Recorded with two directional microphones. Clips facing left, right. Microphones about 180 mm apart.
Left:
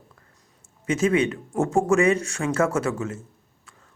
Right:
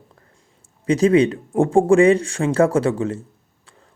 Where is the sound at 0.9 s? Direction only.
35° right (ahead or behind).